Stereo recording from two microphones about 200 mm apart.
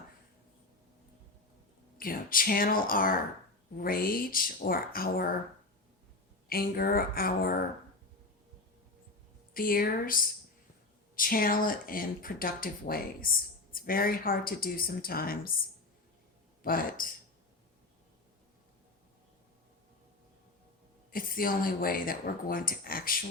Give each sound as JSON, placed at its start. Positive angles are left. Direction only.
{"t": 2.0, "sound": "speech", "side_deg": 45}
{"t": 6.5, "sound": "speech", "side_deg": 50}
{"t": 9.6, "sound": "speech", "side_deg": 45}
{"t": 16.6, "sound": "speech", "side_deg": 45}
{"t": 21.1, "sound": "speech", "side_deg": 45}